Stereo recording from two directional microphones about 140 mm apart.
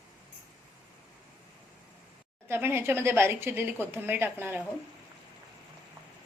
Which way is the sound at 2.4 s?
15° right (ahead or behind).